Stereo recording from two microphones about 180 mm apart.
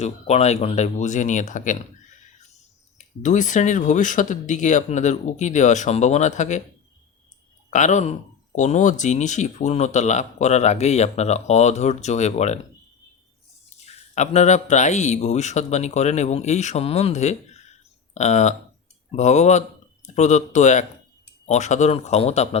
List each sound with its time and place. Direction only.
0.0 s speech: 35° left (ahead or behind)
3.0 s speech: 45° left (ahead or behind)
7.7 s speech: 40° left (ahead or behind)
13.7 s a man's voice: 40° left (ahead or behind)